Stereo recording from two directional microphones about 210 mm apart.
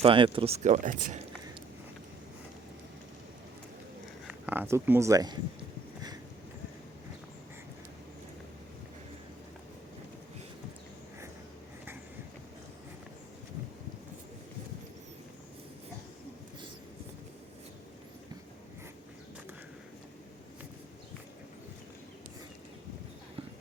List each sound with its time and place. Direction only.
0.0 s speech: 25° right (ahead or behind)
4.3 s speech: 10° right (ahead or behind)